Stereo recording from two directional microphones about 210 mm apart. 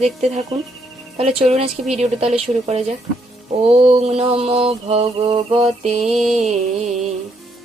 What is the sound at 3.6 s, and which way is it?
Mantra, 30° right (ahead or behind).